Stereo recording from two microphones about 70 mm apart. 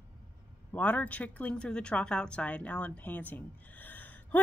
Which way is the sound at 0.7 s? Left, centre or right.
Left.